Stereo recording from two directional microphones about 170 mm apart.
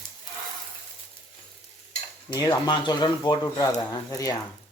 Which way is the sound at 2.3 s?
25° left (ahead or behind).